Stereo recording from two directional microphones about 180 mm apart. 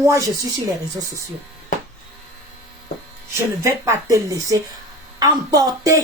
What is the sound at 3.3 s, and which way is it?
Speech, 15° right (ahead or behind).